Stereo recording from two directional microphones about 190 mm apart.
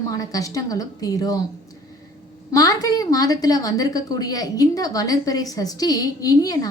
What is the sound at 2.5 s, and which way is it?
A woman's voice, 20° left (ahead or behind).